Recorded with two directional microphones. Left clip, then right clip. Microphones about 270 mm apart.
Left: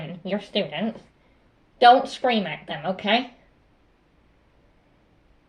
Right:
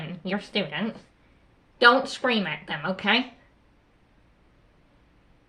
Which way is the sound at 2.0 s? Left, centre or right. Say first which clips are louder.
Left 2 dB; right.